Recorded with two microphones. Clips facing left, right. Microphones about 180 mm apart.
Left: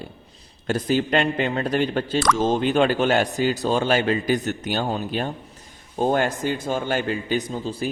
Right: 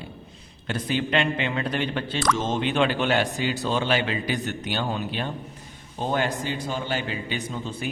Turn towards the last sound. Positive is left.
turn(degrees=35)  # may be behind; listen again after turning